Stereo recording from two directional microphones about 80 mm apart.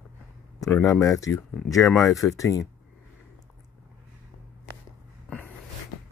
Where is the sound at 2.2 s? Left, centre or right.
Left.